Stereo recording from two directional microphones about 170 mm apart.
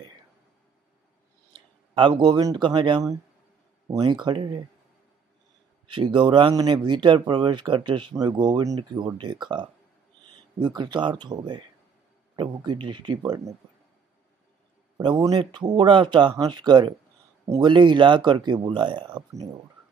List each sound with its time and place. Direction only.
2.0 s speech: 30° right (ahead or behind)
5.9 s speech: 30° right (ahead or behind)
15.0 s speech: 25° right (ahead or behind)